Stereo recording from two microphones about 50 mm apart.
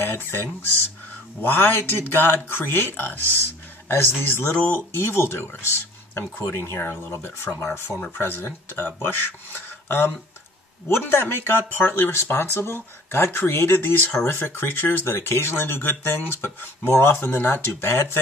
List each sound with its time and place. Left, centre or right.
0.0 s speech: left
6.4 s speech: left
8.1 s speech: left